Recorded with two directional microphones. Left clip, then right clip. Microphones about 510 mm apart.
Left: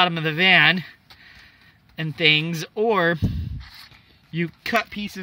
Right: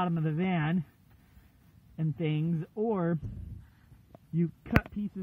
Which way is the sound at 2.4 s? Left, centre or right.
Left.